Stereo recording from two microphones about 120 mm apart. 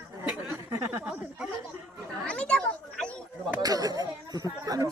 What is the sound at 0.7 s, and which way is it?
Speech, 20° right (ahead or behind).